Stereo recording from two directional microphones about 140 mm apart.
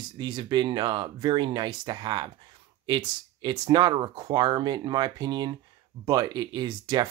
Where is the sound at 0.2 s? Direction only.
30° right (ahead or behind).